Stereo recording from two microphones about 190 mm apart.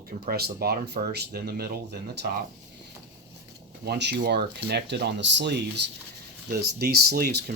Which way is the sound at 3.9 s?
60° right (ahead or behind).